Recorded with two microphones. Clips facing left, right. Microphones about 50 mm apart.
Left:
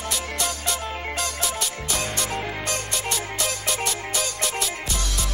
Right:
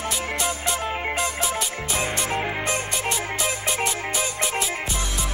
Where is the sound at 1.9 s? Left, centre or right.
Centre.